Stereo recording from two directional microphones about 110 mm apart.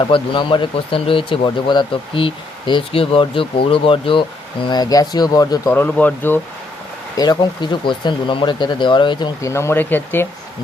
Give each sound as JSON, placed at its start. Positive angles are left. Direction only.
{"t": 0.0, "sound": "speech", "side_deg": 45}
{"t": 1.5, "sound": "speech", "side_deg": 45}
{"t": 4.6, "sound": "speech", "side_deg": 40}
{"t": 5.6, "sound": "speech", "side_deg": 20}
{"t": 7.2, "sound": "speech", "side_deg": 40}
{"t": 9.4, "sound": "speech", "side_deg": 25}